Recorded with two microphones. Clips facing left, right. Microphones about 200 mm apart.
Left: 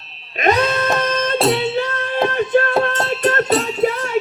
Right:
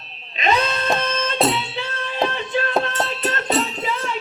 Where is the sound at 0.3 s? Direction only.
50° left (ahead or behind).